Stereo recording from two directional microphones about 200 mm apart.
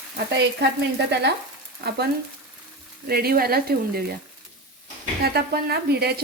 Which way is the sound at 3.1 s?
50° right (ahead or behind).